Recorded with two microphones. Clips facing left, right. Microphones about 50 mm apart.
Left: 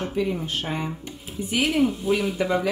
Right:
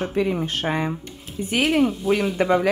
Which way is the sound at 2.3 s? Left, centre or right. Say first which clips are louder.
Right 4 dB; right.